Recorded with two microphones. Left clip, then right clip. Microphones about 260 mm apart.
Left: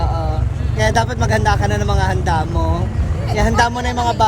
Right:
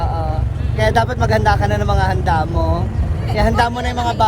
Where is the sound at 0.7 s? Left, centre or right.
Right.